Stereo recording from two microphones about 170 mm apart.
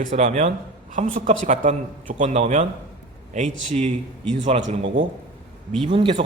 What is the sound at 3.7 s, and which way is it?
A man's voice, 45° right (ahead or behind).